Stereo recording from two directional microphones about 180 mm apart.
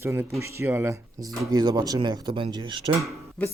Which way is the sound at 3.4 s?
5° left (ahead or behind).